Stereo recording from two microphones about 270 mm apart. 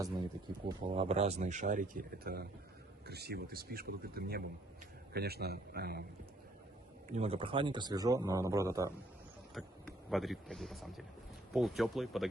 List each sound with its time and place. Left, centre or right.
0.9 s speech: right
7.1 s a man's voice: right
9.6 s speech: centre